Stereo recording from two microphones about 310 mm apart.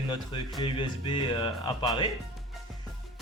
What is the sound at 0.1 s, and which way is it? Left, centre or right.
Speech, centre.